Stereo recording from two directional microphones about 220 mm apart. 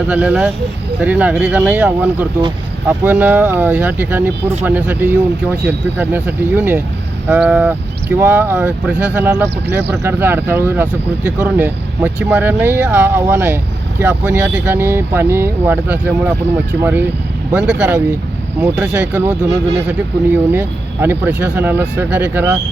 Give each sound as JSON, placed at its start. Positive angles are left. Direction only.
{"t": 0.1, "sound": "speech", "side_deg": -5}
{"t": 19.5, "sound": "speech", "side_deg": -50}
{"t": 19.9, "sound": "speech", "side_deg": -5}